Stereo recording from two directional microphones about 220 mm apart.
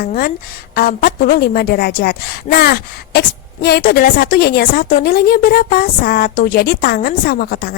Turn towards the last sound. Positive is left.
turn(degrees=45)  # may be behind; listen again after turning